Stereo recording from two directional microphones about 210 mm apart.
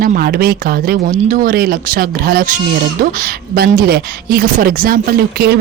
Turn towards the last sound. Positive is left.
turn(degrees=-50)  # may be behind; listen again after turning